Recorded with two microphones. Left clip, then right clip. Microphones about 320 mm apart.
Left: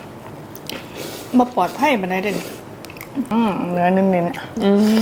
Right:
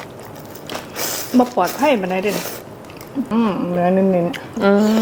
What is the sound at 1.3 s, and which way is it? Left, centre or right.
Speech, centre.